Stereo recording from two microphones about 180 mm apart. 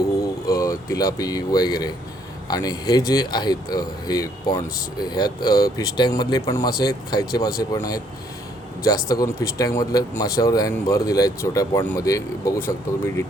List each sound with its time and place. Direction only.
0.0 s speech: 20° left (ahead or behind)
9.2 s speech: 15° left (ahead or behind)